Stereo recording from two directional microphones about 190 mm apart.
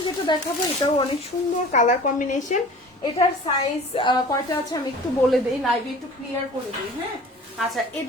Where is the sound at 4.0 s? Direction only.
25° left (ahead or behind).